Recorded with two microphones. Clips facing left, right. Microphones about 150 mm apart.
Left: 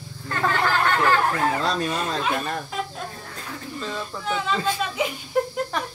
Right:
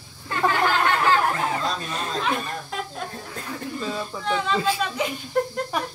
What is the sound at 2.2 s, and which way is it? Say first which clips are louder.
Speech: left 1 dB; centre (ahead or behind).